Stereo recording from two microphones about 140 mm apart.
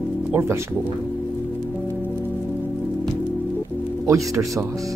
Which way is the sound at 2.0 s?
15° right (ahead or behind).